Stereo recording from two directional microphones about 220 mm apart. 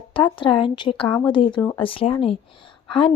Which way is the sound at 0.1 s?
20° left (ahead or behind).